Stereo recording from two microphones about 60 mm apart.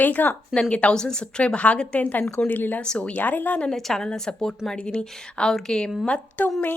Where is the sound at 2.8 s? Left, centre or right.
Centre.